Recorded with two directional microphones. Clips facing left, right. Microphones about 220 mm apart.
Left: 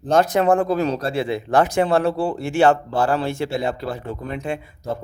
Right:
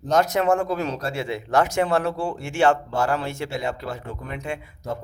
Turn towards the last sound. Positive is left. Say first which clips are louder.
# left 4 dB
turn(degrees=30)  # may be behind; listen again after turning